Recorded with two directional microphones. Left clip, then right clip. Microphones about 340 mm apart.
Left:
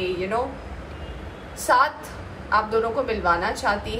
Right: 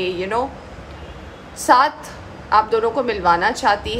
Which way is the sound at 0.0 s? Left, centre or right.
Right.